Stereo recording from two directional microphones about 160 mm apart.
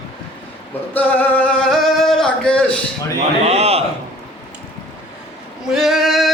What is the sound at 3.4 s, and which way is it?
Speech, 40° right (ahead or behind).